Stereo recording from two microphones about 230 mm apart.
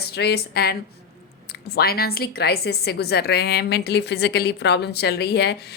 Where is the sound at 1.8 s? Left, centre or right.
Left.